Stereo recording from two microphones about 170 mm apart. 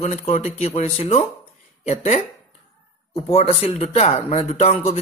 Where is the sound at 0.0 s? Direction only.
40° left (ahead or behind).